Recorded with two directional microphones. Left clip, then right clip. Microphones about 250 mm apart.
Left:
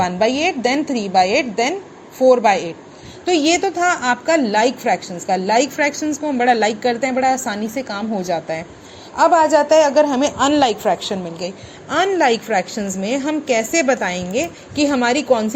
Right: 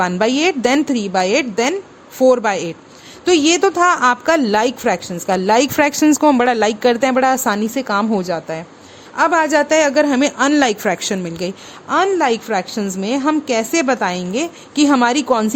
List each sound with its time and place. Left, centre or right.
0.0 s speech: right
10.6 s speech: right
11.9 s a woman's voice: centre